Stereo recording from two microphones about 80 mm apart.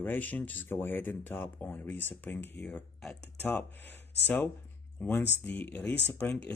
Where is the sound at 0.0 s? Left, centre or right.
Left.